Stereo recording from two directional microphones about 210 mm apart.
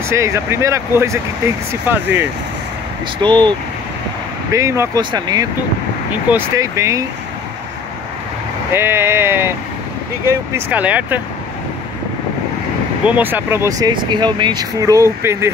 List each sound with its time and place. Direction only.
0.1 s speech: 15° right (ahead or behind)
3.2 s speech: 20° right (ahead or behind)
8.7 s speech: 10° right (ahead or behind)
13.0 s speech: 10° right (ahead or behind)